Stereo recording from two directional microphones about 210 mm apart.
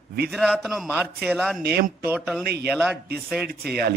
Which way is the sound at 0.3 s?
Centre (ahead or behind).